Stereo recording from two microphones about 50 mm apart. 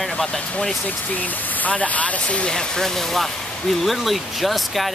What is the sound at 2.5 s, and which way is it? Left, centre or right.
Speech, centre.